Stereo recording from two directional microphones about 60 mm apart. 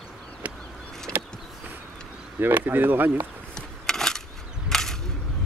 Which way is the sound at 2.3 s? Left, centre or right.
Right.